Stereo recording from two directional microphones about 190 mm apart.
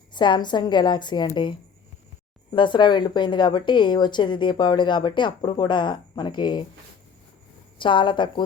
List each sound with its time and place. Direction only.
0.1 s a woman's voice: 25° left (ahead or behind)
2.5 s a woman's voice: 25° left (ahead or behind)
7.8 s a woman's voice: 25° left (ahead or behind)